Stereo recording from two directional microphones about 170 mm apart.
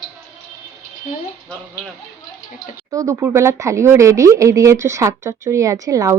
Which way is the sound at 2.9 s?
20° right (ahead or behind).